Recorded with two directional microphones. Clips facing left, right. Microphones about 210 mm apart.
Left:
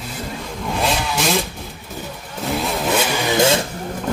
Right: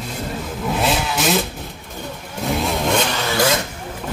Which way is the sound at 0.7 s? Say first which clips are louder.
Even; centre (ahead or behind).